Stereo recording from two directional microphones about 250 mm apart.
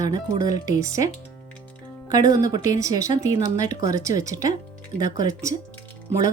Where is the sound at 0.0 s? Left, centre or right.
Centre.